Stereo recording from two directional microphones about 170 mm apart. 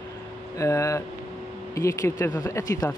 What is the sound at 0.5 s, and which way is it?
Speech, 20° left (ahead or behind).